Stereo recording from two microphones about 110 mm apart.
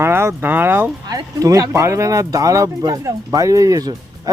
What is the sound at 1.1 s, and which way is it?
Speech, 30° right (ahead or behind).